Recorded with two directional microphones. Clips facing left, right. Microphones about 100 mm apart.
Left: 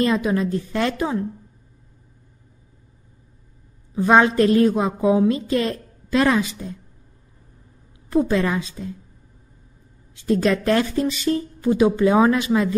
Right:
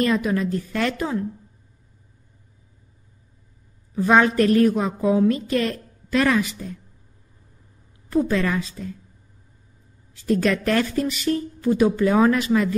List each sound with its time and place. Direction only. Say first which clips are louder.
0.0 s a woman's voice: left 1 dB; 25° left (ahead or behind)
3.9 s a woman's voice: left 2 dB; 20° left (ahead or behind)
8.1 s a woman's voice: left 2 dB; 20° left (ahead or behind)
10.2 s a woman's voice: left 2 dB; 20° left (ahead or behind)